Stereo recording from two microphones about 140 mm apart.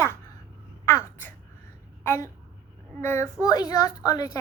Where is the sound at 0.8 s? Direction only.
20° left (ahead or behind).